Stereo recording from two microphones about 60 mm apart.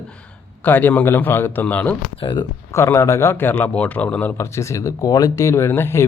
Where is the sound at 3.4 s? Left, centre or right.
Left.